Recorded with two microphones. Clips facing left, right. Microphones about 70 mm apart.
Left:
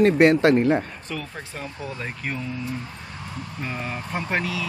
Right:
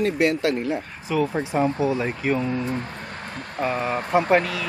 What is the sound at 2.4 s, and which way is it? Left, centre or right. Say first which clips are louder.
Speech: right 6 dB; right.